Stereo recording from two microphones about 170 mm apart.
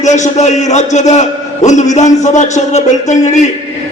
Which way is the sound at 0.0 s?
45° left (ahead or behind).